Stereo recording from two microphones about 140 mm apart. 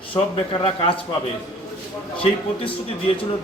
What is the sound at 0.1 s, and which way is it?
Speech, 40° left (ahead or behind).